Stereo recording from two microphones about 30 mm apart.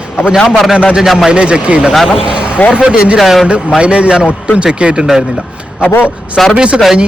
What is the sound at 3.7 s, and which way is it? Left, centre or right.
A man's voice, right.